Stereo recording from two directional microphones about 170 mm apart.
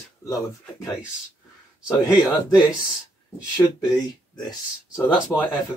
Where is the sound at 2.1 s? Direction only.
5° right (ahead or behind).